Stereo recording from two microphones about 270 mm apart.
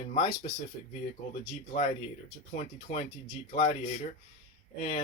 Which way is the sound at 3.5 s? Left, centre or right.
Left.